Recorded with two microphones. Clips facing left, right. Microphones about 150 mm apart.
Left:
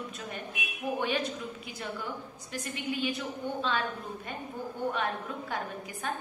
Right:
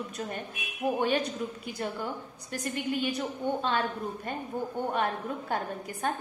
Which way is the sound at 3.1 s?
45° right (ahead or behind).